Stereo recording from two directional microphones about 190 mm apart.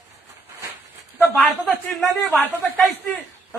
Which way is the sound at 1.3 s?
5° left (ahead or behind).